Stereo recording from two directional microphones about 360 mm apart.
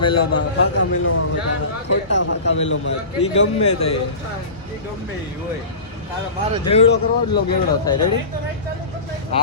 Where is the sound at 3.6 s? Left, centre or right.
Left.